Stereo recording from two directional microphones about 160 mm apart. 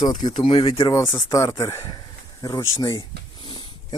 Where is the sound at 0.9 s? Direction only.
20° left (ahead or behind).